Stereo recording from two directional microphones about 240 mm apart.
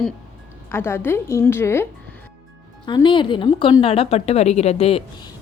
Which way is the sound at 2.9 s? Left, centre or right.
Centre.